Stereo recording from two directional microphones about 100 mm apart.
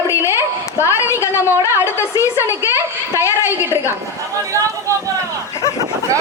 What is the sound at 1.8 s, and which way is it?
Speech, 30° left (ahead or behind).